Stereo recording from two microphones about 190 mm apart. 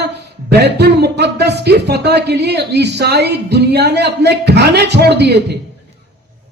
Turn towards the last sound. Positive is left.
turn(degrees=-60)  # may be behind; listen again after turning